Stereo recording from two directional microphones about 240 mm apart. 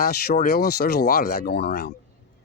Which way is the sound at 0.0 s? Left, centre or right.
Left.